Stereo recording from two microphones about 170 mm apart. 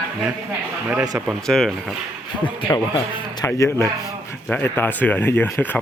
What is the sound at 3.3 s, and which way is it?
Speech, 15° left (ahead or behind).